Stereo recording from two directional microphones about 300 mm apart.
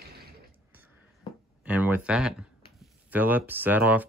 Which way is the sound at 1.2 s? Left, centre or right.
Centre.